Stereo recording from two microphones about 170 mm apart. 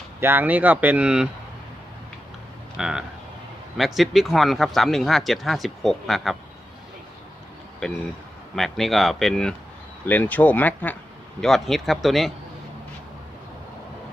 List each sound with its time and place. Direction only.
0.2 s speech: 10° right (ahead or behind)
2.7 s speech: 5° right (ahead or behind)
8.5 s speech: centre (ahead or behind)